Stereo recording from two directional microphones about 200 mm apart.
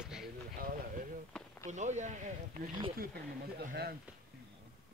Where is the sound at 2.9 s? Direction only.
50° right (ahead or behind).